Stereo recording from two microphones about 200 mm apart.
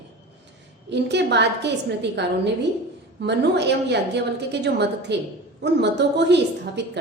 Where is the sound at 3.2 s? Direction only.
60° right (ahead or behind).